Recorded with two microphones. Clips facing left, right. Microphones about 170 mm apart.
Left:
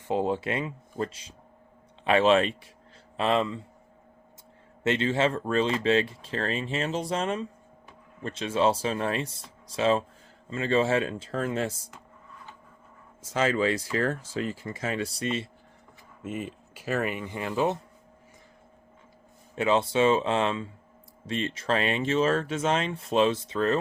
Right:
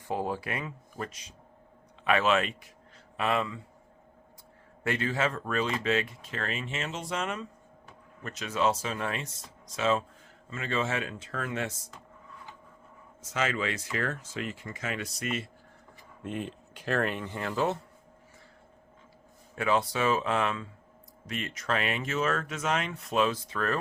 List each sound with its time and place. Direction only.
0.1 s speech: 25° left (ahead or behind)
4.8 s speech: 25° left (ahead or behind)
13.3 s speech: 30° left (ahead or behind)
16.2 s speech: 5° left (ahead or behind)
19.5 s speech: 25° left (ahead or behind)